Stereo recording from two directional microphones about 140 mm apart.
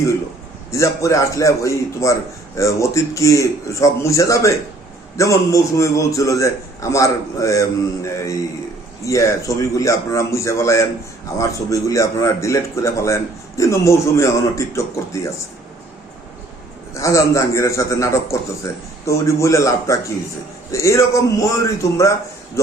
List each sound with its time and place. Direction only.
0.7 s a man's voice: 20° left (ahead or behind)
16.9 s a man's voice: 20° left (ahead or behind)